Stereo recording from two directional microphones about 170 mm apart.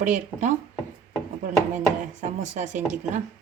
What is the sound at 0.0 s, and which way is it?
Speech, 45° right (ahead or behind).